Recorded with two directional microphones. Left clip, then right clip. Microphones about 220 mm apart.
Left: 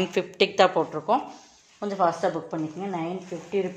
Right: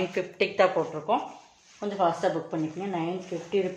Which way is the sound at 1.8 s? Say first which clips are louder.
Left 2 dB; 25° left (ahead or behind).